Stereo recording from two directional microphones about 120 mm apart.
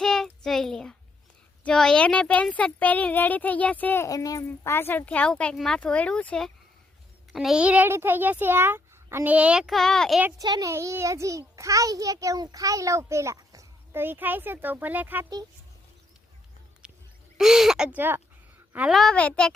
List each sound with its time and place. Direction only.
0.0 s child singing: 5° left (ahead or behind)
1.6 s speech: 5° left (ahead or behind)
4.0 s speech: 30° left (ahead or behind); by 6.5 s 5° left (ahead or behind)
7.3 s a child's voice: 5° right (ahead or behind)
10.3 s a child's voice: 30° right (ahead or behind); by 15.3 s 15° right (ahead or behind)
16.8 s a sound: 10° right (ahead or behind)
17.3 s a child's voice: 5° right (ahead or behind)
18.9 s a child's voice: 5° left (ahead or behind)